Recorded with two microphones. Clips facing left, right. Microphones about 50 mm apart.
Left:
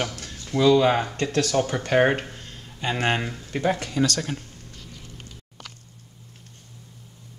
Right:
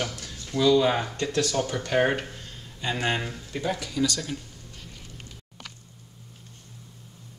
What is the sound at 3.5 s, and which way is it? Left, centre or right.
Speech, left.